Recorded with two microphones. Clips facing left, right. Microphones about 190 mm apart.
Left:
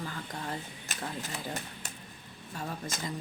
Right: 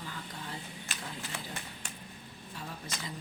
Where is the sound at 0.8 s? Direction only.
40° left (ahead or behind).